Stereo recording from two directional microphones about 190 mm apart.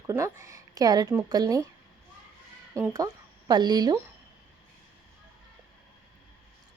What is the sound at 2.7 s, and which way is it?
Speech, 15° right (ahead or behind).